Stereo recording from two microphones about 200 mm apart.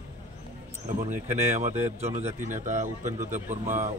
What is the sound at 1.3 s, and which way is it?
A man's voice, 35° right (ahead or behind).